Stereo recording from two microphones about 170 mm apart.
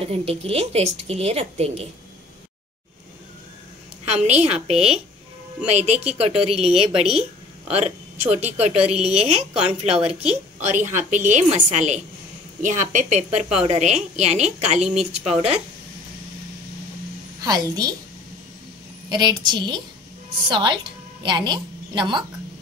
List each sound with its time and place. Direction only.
0.0 s a woman's voice: 35° right (ahead or behind)
4.0 s a woman's voice: 40° right (ahead or behind)
14.9 s speech: 5° right (ahead or behind)
17.4 s a woman's voice: 20° right (ahead or behind)
19.0 s a woman's voice: 25° right (ahead or behind)